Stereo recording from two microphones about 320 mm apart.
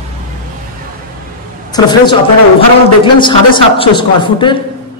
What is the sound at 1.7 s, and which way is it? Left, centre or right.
A man's voice, centre.